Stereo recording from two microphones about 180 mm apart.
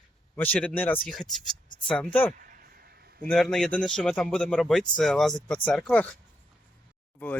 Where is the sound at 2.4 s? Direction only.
50° right (ahead or behind).